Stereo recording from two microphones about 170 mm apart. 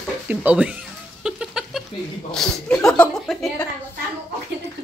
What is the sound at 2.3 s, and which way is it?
Speech, 5° left (ahead or behind).